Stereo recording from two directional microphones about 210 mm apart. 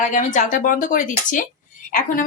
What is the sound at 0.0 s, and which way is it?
A woman's voice, 35° left (ahead or behind).